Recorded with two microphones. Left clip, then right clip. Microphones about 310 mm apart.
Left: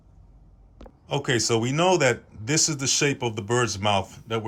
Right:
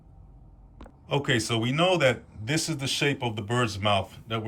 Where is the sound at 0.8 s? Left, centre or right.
Centre.